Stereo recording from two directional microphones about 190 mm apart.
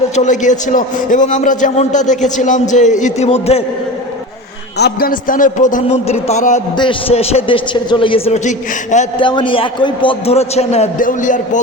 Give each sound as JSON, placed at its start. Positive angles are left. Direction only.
{"t": 0.2, "sound": "a man's voice", "side_deg": 40}
{"t": 4.8, "sound": "a man's voice", "side_deg": 50}
{"t": 6.7, "sound": "a man's voice", "side_deg": 30}
{"t": 9.1, "sound": "a man's voice", "side_deg": 25}